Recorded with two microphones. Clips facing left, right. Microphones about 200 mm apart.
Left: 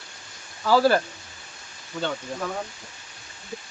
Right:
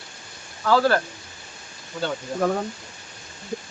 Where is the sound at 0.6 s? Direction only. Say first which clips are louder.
Even; 5° left (ahead or behind).